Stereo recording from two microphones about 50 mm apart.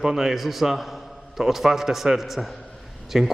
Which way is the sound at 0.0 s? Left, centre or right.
Centre.